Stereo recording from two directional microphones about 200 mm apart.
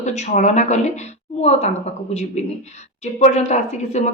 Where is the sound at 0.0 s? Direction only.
35° left (ahead or behind).